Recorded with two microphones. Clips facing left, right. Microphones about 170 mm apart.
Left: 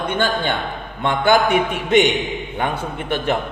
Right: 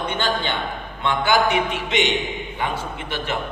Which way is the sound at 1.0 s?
55° left (ahead or behind).